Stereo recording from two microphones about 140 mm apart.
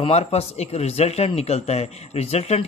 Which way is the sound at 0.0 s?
45° left (ahead or behind).